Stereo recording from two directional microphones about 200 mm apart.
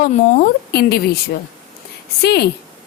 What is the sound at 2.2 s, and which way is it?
Speech, 55° left (ahead or behind).